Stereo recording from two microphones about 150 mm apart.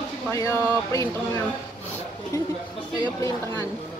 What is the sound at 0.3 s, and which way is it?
Speech, 20° left (ahead or behind).